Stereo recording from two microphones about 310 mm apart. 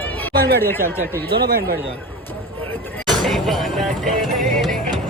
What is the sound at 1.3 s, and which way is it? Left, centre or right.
Speech, right.